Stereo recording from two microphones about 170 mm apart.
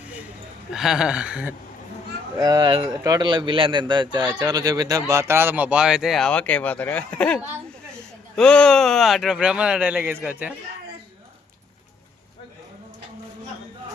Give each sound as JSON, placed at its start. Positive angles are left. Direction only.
{"t": 0.7, "sound": "speech", "side_deg": -5}
{"t": 2.4, "sound": "a man's voice", "side_deg": -25}